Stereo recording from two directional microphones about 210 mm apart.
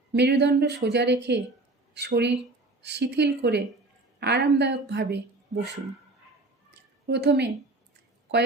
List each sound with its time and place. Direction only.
0.1 s speech: 55° right (ahead or behind)
7.1 s a woman's voice: 55° right (ahead or behind)